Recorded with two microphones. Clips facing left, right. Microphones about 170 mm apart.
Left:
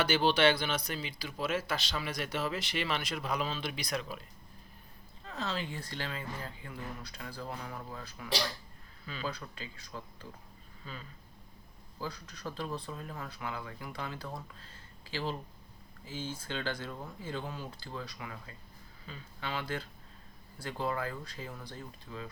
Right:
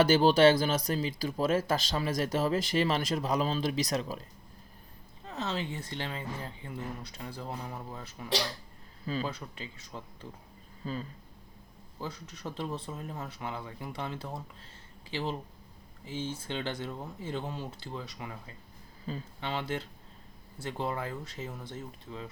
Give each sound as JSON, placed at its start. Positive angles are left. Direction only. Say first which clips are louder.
{"t": 0.0, "sound": "speech", "louder": "right 6 dB", "side_deg": -40}
{"t": 5.2, "sound": "speech", "louder": "right 2 dB", "side_deg": -20}
{"t": 10.8, "sound": "speech", "louder": "right 10 dB", "side_deg": -40}
{"t": 11.9, "sound": "speech", "louder": "right 1 dB", "side_deg": -25}
{"t": 19.1, "sound": "speech", "louder": "right 10 dB", "side_deg": -35}
{"t": 19.4, "sound": "speech", "louder": "right 1 dB", "side_deg": -25}